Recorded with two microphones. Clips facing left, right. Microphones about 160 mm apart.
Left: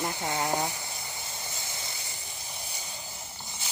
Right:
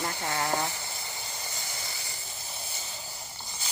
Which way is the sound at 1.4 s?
20° left (ahead or behind).